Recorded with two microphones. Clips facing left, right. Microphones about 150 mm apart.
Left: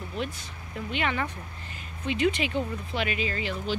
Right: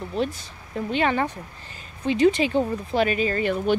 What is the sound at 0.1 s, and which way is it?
Speech, 35° right (ahead or behind).